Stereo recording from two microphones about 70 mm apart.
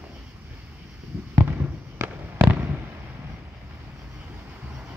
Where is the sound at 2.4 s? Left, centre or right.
Right.